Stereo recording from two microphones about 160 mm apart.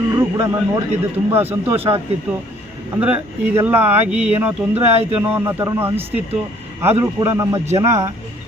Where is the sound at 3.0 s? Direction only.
10° right (ahead or behind).